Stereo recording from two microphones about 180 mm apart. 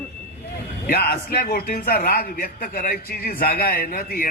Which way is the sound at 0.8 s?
55° left (ahead or behind).